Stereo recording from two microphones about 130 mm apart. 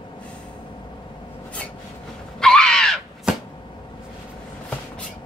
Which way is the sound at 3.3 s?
10° right (ahead or behind).